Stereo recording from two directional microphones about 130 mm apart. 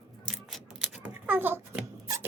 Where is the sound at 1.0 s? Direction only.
15° right (ahead or behind).